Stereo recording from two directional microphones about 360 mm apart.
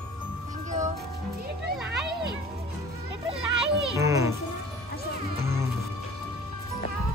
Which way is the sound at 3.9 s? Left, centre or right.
Centre.